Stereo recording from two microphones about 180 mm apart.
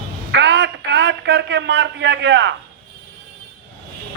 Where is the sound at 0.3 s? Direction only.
75° right (ahead or behind).